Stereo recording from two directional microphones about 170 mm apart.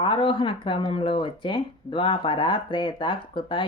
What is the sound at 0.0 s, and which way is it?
Speech, 30° left (ahead or behind).